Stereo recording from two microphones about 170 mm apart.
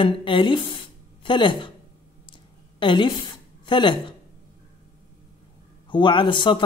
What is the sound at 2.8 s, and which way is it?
A woman's voice, 30° left (ahead or behind).